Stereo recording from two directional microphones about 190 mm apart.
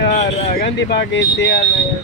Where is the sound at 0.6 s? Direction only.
60° left (ahead or behind).